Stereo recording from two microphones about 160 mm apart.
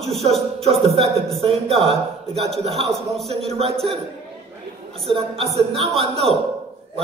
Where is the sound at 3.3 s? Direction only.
40° right (ahead or behind).